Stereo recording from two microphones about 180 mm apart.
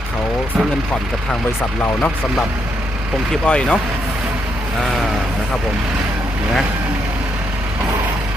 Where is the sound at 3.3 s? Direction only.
5° left (ahead or behind).